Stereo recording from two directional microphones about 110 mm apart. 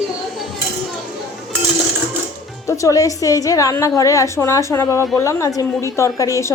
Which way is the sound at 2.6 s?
30° left (ahead or behind).